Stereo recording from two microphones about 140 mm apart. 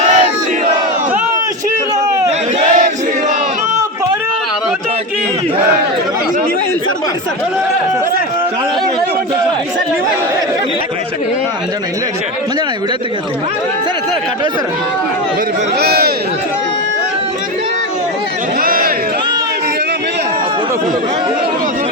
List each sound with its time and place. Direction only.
0.0 s battle cry: 60° right (ahead or behind)
2.7 s a sound: 70° right (ahead or behind)
15.9 s a man's voice: 90° right
18.6 s crowd: 85° right